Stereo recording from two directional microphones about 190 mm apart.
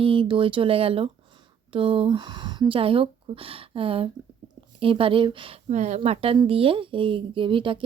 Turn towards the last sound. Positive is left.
turn(degrees=-25)  # may be behind; listen again after turning